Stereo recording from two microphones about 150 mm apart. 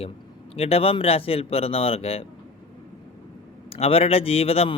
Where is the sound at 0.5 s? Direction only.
40° left (ahead or behind).